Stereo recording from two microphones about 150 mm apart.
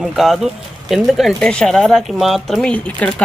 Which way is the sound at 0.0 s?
Centre (ahead or behind).